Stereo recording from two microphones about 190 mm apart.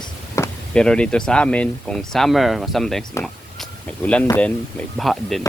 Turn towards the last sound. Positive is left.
turn(degrees=0)  # may be behind; listen again after turning